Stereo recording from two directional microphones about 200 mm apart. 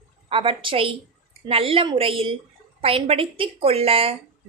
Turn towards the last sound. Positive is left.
turn(degrees=-30)  # may be behind; listen again after turning